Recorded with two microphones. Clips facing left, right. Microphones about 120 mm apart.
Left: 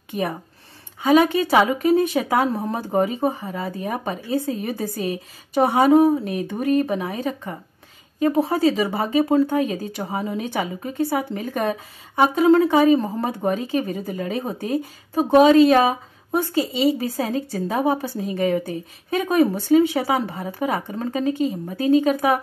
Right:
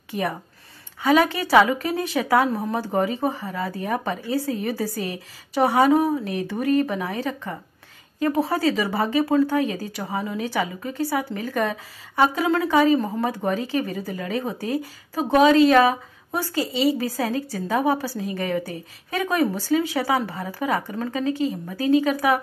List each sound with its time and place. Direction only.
1.0 s speech: 20° left (ahead or behind)